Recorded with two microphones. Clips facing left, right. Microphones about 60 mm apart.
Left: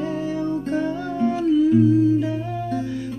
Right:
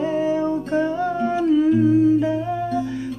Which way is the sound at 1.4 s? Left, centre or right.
Right.